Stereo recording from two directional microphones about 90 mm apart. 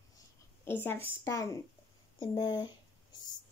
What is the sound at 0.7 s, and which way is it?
Speech, 25° left (ahead or behind).